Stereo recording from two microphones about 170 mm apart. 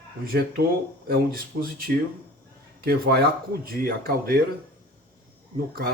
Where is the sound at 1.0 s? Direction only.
60° right (ahead or behind).